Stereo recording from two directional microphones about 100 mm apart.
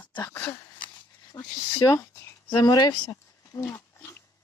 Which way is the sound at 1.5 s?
45° left (ahead or behind).